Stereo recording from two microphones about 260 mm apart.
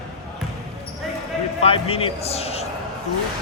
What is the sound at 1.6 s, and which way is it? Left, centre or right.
A man's voice, left.